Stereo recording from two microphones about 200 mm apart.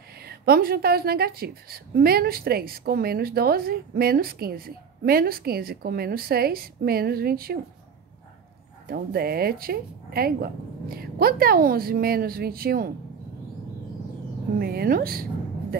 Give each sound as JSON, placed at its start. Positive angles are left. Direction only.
{"t": 0.2, "sound": "a woman's voice", "side_deg": -50}
{"t": 8.8, "sound": "a woman's voice", "side_deg": -50}
{"t": 14.6, "sound": "a woman's voice", "side_deg": -50}